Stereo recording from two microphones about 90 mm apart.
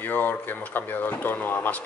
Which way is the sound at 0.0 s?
20° left (ahead or behind).